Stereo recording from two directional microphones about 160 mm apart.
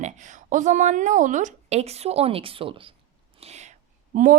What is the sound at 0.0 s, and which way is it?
Speech, 50° right (ahead or behind).